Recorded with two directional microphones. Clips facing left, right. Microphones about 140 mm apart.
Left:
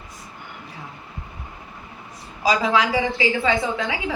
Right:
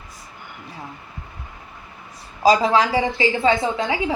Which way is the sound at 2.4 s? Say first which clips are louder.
Right 4 dB; 35° right (ahead or behind).